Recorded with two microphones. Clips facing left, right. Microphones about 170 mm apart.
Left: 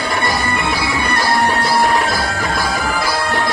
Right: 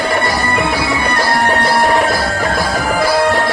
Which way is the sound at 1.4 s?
45° right (ahead or behind).